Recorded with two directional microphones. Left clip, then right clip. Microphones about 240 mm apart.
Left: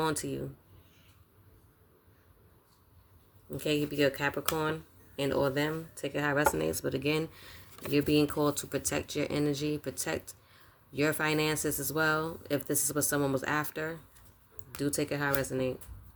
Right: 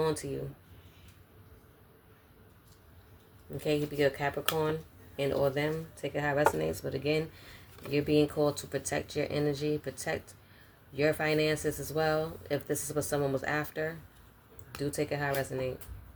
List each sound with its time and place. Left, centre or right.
0.0 s speech: left
3.6 s speech: left